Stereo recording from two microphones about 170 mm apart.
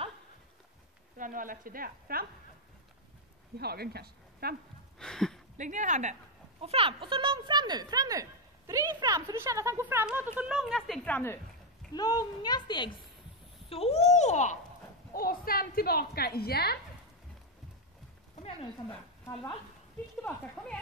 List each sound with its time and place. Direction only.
1.1 s speech: 50° right (ahead or behind)
3.5 s speech: 70° right (ahead or behind)
4.9 s a sound: 5° left (ahead or behind)
5.6 s speech: 45° right (ahead or behind)
6.6 s speech: 35° right (ahead or behind); by 11.3 s 10° left (ahead or behind)
11.9 s a woman's voice: 25° left (ahead or behind)
13.7 s speech: 35° left (ahead or behind)
15.1 s a woman's voice: 60° left (ahead or behind)